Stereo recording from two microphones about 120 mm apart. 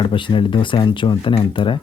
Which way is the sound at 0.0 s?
45° left (ahead or behind).